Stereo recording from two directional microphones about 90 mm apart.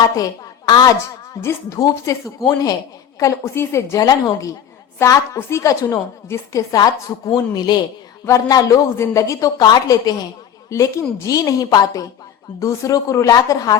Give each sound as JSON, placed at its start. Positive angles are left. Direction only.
{"t": 0.2, "sound": "a woman's voice", "side_deg": 45}
{"t": 1.4, "sound": "a woman's voice", "side_deg": 35}
{"t": 3.2, "sound": "a woman's voice", "side_deg": 35}
{"t": 8.2, "sound": "a woman's voice", "side_deg": 40}
{"t": 10.7, "sound": "a woman's voice", "side_deg": 35}